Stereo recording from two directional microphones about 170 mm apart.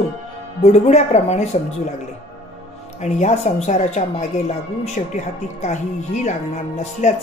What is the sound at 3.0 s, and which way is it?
Speech, 45° left (ahead or behind).